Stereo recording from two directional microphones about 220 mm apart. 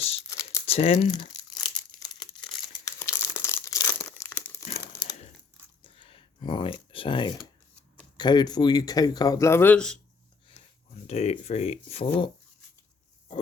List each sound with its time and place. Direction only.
0.0 s crumpling: 25° left (ahead or behind)
0.3 s crumpling: 15° left (ahead or behind)
0.6 s crumpling: 25° left (ahead or behind)
2.8 s crumpling: 10° left (ahead or behind)
5.8 s typing: 25° left (ahead or behind)
8.2 s speech: 20° left (ahead or behind)
11.0 s speech: 30° left (ahead or behind)